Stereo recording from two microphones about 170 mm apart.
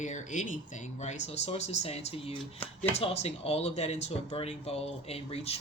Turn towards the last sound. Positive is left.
turn(degrees=35)  # may be behind; listen again after turning